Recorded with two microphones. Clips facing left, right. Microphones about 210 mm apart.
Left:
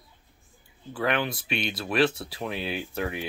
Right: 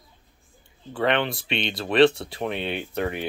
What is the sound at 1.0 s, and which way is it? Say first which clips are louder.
Speech: right 4 dB; 25° right (ahead or behind).